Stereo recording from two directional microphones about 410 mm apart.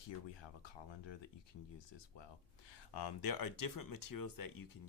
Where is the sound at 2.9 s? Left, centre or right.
Left.